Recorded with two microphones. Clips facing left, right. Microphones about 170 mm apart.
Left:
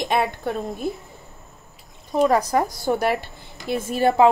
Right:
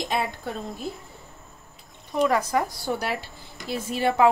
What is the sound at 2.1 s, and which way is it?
A woman's voice, 40° left (ahead or behind).